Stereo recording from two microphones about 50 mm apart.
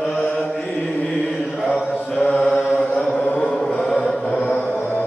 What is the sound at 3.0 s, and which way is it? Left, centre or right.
Chant, left.